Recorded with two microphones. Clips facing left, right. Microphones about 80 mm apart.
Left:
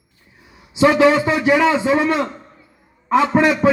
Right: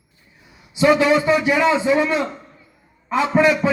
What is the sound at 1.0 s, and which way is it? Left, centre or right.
Speech, left.